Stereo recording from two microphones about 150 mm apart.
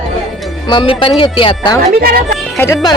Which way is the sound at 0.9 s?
35° left (ahead or behind).